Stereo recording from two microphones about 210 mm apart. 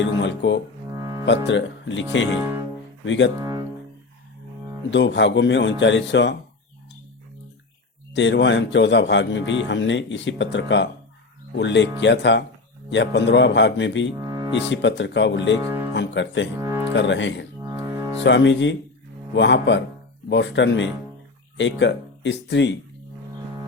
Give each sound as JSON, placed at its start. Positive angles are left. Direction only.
{"t": 0.0, "sound": "speech", "side_deg": 60}
{"t": 0.9, "sound": "music", "side_deg": -15}
{"t": 1.5, "sound": "a man's voice", "side_deg": 60}
{"t": 3.3, "sound": "speech", "side_deg": -15}
{"t": 4.9, "sound": "a man's voice", "side_deg": 55}
{"t": 8.1, "sound": "a man's voice", "side_deg": 60}
{"t": 14.2, "sound": "music", "side_deg": -15}
{"t": 14.5, "sound": "a man's voice", "side_deg": 60}
{"t": 15.6, "sound": "speech", "side_deg": -10}
{"t": 16.0, "sound": "speech", "side_deg": 60}
{"t": 16.6, "sound": "music", "side_deg": -15}
{"t": 16.9, "sound": "a man's voice", "side_deg": 60}
{"t": 17.6, "sound": "music", "side_deg": -15}
{"t": 18.2, "sound": "a man's voice", "side_deg": 55}